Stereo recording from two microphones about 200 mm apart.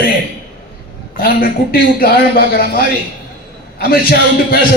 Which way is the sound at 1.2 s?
45° left (ahead or behind).